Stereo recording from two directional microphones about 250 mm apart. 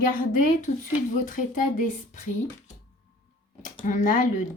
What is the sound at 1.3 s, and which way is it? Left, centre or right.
Speech, left.